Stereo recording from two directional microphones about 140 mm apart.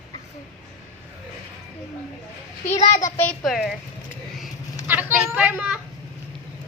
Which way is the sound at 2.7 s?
50° left (ahead or behind).